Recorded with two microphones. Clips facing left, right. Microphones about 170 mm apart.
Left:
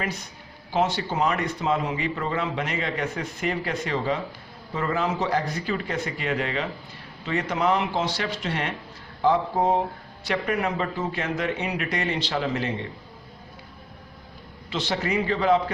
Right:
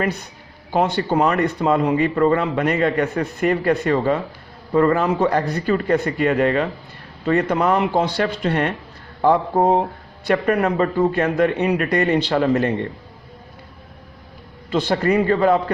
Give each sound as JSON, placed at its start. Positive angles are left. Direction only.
{"t": 0.7, "sound": "speech", "side_deg": -55}
{"t": 14.7, "sound": "speech", "side_deg": -55}